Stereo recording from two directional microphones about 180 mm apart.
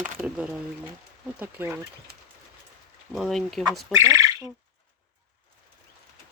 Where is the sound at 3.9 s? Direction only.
15° right (ahead or behind).